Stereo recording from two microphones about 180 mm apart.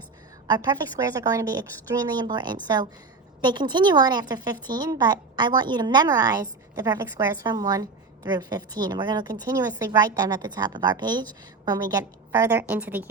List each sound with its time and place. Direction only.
0.4 s a woman's voice: 25° right (ahead or behind)